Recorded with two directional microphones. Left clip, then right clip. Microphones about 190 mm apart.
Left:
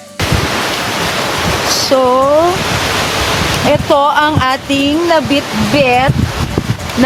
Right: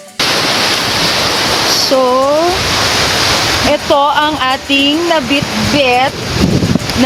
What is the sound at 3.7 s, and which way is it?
Speech, 10° left (ahead or behind).